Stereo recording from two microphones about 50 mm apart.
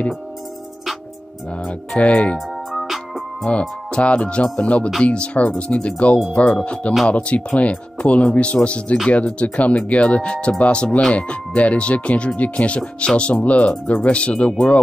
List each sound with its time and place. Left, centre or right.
2.0 s speech: left
2.7 s music: centre
3.4 s speech: left